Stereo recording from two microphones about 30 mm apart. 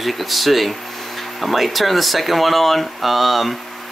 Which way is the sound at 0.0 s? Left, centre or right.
Centre.